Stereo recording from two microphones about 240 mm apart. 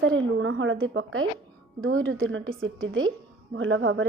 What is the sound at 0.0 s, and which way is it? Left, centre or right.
A woman's voice, right.